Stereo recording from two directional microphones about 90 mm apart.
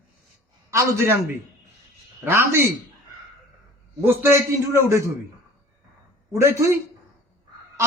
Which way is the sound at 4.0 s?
25° right (ahead or behind).